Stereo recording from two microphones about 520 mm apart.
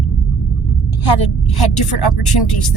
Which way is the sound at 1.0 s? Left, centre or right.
Left.